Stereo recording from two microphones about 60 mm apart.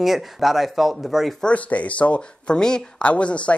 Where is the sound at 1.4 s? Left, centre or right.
Left.